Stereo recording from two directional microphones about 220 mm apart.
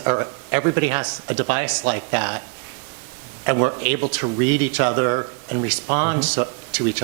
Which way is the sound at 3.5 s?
15° right (ahead or behind).